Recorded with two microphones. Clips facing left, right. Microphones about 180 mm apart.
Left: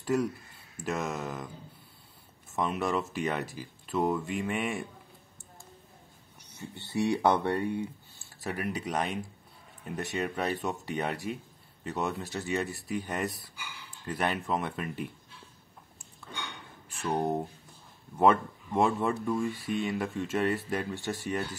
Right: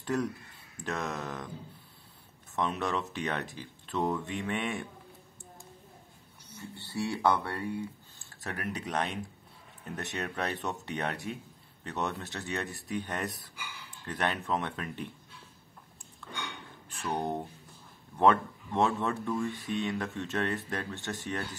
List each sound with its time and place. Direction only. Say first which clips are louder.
0.0 s speech: left 3 dB; centre (ahead or behind)
2.5 s speech: left 2 dB; centre (ahead or behind)
6.7 s speech: left 5 dB; 20° left (ahead or behind)
8.5 s speech: left 3 dB; centre (ahead or behind)
17.1 s speech: left 4 dB; 5° left (ahead or behind)